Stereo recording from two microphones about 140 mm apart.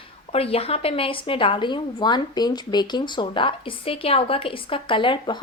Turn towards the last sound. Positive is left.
turn(degrees=35)  # may be behind; listen again after turning